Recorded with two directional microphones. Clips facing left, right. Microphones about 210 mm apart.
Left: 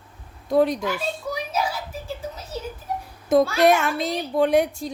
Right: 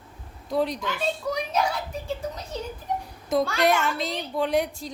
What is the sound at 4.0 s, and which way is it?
Speech, 55° left (ahead or behind).